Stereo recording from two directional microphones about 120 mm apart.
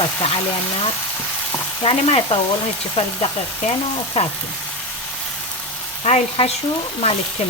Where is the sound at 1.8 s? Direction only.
50° left (ahead or behind).